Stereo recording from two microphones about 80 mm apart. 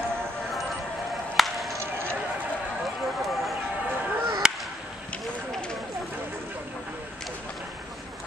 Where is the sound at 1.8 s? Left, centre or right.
Right.